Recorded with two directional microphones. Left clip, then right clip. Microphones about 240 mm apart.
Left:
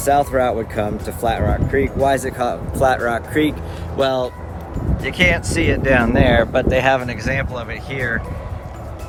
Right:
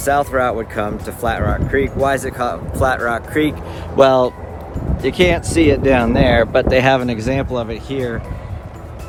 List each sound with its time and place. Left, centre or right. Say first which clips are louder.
0.0 s speech: even; centre
3.9 s speech: right 7 dB; right
5.0 s speech: right 2 dB; right
7.1 s speech: right 3 dB; right